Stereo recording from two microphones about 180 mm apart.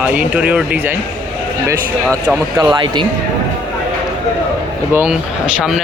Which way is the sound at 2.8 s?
25° right (ahead or behind).